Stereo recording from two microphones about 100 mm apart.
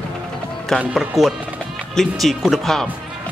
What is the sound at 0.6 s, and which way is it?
Speech, 5° left (ahead or behind).